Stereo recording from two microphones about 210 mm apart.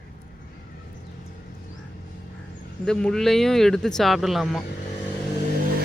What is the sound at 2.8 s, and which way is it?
Speech, 5° left (ahead or behind).